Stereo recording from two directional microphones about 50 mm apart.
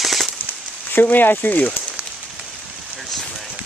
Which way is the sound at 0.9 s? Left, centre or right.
Left.